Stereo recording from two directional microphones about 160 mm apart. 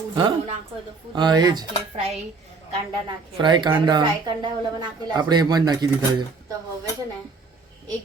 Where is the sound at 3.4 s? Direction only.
30° right (ahead or behind).